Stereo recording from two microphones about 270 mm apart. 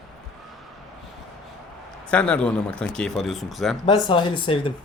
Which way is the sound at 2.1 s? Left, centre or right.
Centre.